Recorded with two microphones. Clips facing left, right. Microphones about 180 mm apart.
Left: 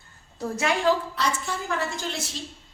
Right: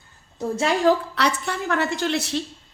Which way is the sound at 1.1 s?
65° right (ahead or behind).